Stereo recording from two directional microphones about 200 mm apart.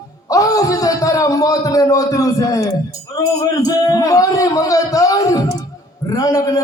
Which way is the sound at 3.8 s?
15° left (ahead or behind).